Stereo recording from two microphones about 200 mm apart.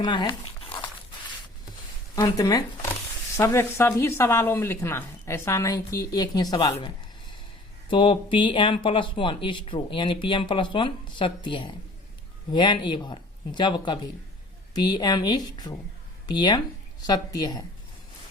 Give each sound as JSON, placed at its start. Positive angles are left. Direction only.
{"t": 0.0, "sound": "speech", "side_deg": 20}
{"t": 2.1, "sound": "speech", "side_deg": 20}
{"t": 7.9, "sound": "speech", "side_deg": 25}